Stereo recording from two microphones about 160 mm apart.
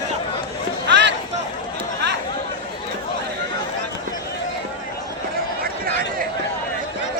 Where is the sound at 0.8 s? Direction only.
90° right.